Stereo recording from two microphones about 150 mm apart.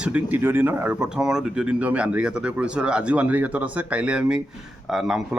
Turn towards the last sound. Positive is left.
turn(degrees=0)  # may be behind; listen again after turning